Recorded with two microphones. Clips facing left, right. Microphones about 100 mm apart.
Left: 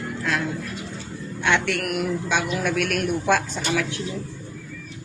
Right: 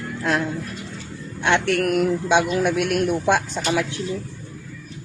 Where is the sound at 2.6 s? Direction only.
20° right (ahead or behind).